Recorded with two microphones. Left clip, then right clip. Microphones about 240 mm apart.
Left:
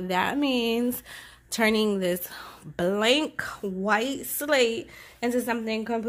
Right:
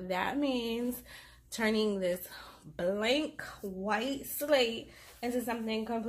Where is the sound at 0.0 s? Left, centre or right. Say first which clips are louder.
Left 7 dB; left.